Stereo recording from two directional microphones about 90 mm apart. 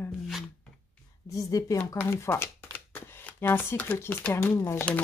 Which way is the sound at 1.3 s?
40° left (ahead or behind).